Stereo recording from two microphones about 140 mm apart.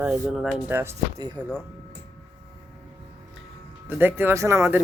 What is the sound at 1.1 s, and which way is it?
Speech, 30° right (ahead or behind).